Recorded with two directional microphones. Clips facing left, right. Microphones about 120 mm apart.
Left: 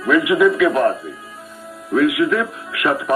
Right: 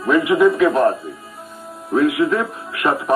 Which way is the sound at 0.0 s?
35° right (ahead or behind).